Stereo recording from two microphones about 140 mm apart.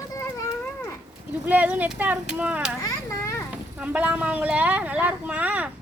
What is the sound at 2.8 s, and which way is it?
Children playing, 25° left (ahead or behind).